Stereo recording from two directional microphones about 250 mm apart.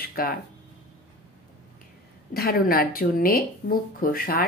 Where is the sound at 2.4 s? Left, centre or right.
Left.